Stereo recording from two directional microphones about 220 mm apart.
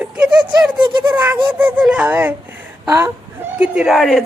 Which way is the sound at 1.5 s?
5° right (ahead or behind).